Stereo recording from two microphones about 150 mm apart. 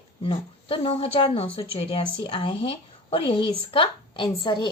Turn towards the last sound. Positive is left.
turn(degrees=30)  # may be behind; listen again after turning